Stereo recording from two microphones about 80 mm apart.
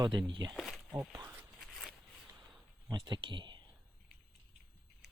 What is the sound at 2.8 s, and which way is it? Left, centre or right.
Speech, right.